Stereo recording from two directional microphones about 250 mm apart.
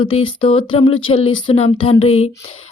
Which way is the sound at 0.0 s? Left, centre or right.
Left.